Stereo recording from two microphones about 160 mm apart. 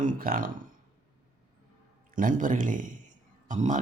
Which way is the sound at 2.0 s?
55° right (ahead or behind).